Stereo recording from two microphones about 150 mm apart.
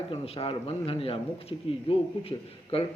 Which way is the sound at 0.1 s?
40° left (ahead or behind).